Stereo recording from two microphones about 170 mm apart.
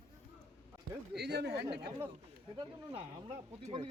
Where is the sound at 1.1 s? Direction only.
75° right (ahead or behind).